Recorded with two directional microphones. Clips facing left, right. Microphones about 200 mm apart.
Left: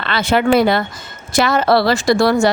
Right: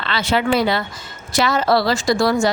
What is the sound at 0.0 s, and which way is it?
Speech, 50° left (ahead or behind).